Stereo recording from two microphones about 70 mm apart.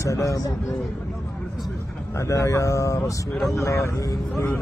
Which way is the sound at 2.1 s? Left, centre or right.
Left.